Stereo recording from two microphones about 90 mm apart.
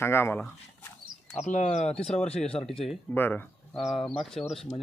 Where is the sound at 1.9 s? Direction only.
10° left (ahead or behind).